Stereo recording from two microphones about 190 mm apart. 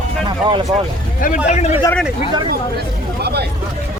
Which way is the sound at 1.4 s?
35° left (ahead or behind).